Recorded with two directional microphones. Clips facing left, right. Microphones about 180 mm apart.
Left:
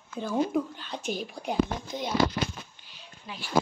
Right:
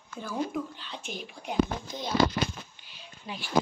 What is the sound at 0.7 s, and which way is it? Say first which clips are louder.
Speech: left 6 dB; 45° left (ahead or behind).